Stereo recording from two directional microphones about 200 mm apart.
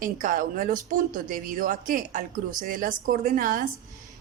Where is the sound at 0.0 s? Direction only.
40° right (ahead or behind).